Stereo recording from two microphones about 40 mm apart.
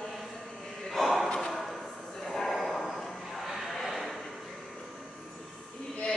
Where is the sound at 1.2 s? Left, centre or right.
Centre.